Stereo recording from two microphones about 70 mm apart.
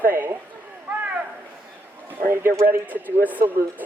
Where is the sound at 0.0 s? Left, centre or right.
Right.